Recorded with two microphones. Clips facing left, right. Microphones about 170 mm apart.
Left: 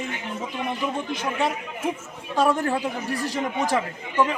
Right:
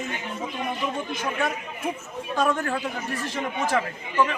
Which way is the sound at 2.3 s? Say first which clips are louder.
Left 3 dB; 30° left (ahead or behind).